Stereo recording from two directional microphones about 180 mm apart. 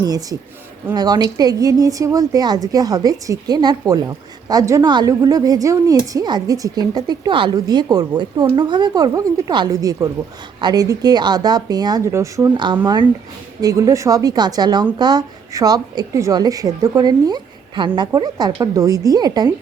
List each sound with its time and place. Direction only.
0.0 s a woman's voice: 20° right (ahead or behind)